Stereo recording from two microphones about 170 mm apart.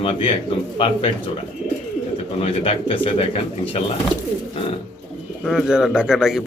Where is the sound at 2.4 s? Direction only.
35° left (ahead or behind).